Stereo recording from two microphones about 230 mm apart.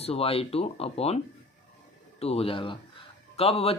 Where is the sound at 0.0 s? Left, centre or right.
Left.